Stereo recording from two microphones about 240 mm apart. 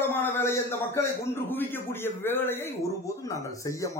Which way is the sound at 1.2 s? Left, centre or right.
Centre.